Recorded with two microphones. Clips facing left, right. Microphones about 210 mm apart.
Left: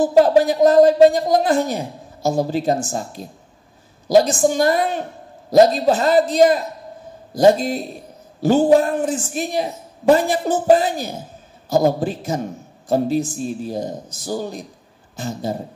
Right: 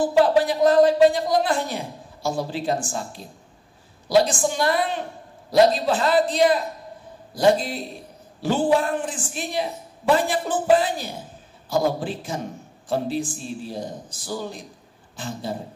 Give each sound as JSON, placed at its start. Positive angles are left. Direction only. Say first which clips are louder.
{"t": 0.0, "sound": "a man's voice", "louder": "left 5 dB", "side_deg": 40}